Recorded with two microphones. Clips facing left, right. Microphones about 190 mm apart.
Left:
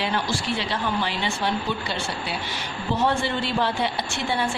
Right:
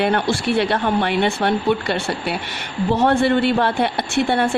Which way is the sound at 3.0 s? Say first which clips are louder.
Right 8 dB; 60° right (ahead or behind).